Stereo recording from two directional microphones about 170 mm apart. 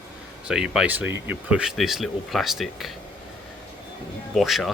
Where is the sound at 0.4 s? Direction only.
5° right (ahead or behind).